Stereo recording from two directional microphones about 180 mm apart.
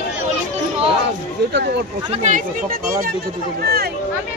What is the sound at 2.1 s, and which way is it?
Speech, 40° right (ahead or behind).